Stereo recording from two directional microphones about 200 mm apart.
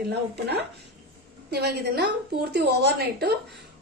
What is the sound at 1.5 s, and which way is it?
A woman's voice, 55° right (ahead or behind).